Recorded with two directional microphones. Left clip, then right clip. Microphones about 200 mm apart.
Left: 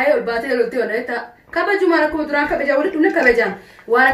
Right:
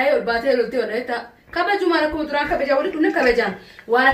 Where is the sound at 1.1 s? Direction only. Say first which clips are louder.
Left 2 dB; 20° left (ahead or behind).